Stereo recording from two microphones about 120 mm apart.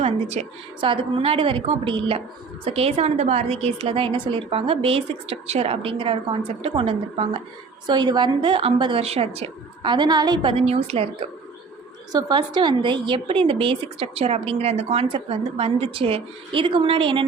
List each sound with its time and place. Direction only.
0.0 s speech: 60° right (ahead or behind)
7.9 s speech: 40° right (ahead or behind); by 9.5 s 60° right (ahead or behind)
9.8 s a woman's voice: 40° right (ahead or behind)
10.5 s a woman's voice: 55° right (ahead or behind)
12.1 s speech: 40° right (ahead or behind)